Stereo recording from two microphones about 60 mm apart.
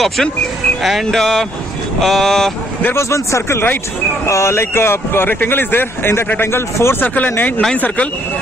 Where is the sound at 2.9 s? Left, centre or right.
Left.